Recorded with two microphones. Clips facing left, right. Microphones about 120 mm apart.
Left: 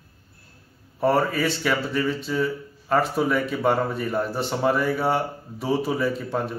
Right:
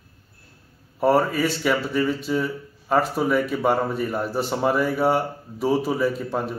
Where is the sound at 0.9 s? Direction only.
10° right (ahead or behind).